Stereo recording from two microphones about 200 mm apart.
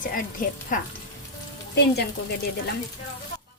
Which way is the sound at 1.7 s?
55° left (ahead or behind).